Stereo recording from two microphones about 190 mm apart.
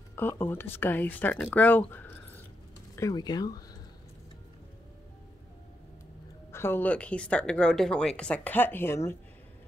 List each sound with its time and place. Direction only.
0.1 s speech: 10° left (ahead or behind)
6.5 s speech: 10° left (ahead or behind)